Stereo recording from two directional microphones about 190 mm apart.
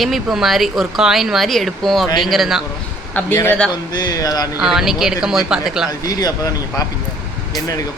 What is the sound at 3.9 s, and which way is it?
Speech, 20° left (ahead or behind).